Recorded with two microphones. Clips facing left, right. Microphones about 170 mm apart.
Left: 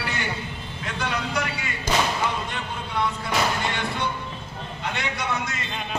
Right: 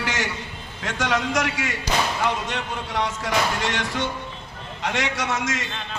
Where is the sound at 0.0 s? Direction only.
90° right.